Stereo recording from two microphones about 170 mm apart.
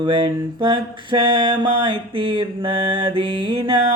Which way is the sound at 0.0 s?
25° right (ahead or behind).